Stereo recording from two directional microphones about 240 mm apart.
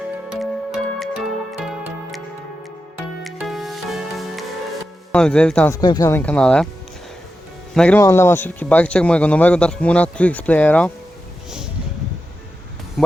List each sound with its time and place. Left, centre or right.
0.3 s music: centre
3.2 s music: centre
5.1 s speech: centre
7.7 s speech: centre